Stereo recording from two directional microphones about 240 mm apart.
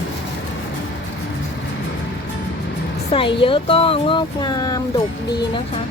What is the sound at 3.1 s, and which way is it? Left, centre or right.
Speech, left.